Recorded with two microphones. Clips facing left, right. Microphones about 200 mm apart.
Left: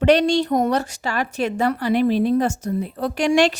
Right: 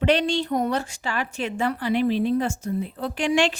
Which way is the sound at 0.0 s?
45° left (ahead or behind).